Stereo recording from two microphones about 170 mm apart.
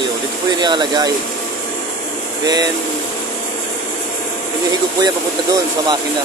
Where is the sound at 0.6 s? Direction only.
25° right (ahead or behind).